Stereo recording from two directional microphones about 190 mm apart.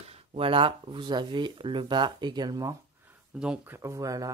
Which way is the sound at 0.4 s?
25° right (ahead or behind).